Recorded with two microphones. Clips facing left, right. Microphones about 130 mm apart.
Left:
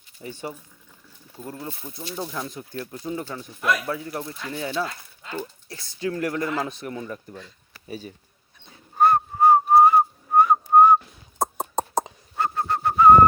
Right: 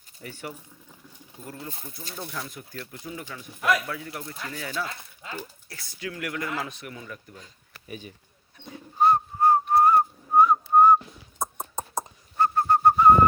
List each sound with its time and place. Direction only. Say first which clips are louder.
0.2 s speech: left 4 dB; 25° left (ahead or behind)
5.9 s speech: left 7 dB; 30° left (ahead or behind)
9.0 s whistling: left 3 dB; 65° left (ahead or behind)
11.4 s a sound: left 6 dB; 90° left
11.8 s bird: left 7 dB; 80° left